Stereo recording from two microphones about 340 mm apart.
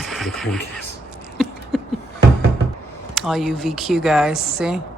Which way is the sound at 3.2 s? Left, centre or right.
Centre.